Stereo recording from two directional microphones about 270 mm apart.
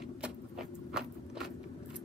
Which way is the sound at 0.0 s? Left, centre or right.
Centre.